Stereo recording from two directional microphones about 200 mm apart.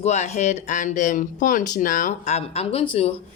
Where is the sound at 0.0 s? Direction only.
35° left (ahead or behind).